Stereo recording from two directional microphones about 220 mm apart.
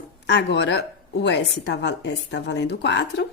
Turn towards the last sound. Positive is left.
turn(degrees=50)  # may be behind; listen again after turning